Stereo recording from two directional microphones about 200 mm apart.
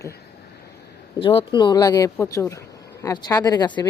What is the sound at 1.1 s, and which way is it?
Speech, 25° left (ahead or behind).